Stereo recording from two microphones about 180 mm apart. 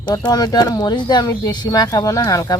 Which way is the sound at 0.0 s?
20° left (ahead or behind).